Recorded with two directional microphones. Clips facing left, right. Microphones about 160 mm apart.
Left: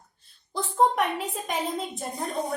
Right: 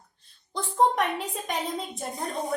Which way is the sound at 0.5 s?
Centre (ahead or behind).